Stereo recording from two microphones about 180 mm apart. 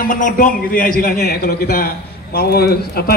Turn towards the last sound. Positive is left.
turn(degrees=60)  # may be behind; listen again after turning